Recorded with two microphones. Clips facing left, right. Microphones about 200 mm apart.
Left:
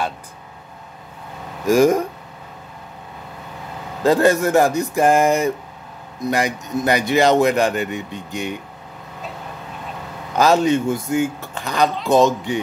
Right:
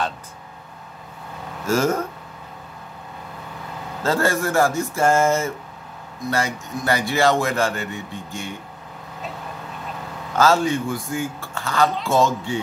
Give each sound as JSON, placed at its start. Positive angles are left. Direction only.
{"t": 1.7, "sound": "speech", "side_deg": 15}
{"t": 4.0, "sound": "a man's voice", "side_deg": 15}
{"t": 10.3, "sound": "a man's voice", "side_deg": 20}